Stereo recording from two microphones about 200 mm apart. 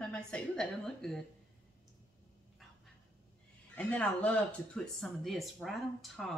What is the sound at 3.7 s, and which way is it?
A woman's voice, 5° left (ahead or behind).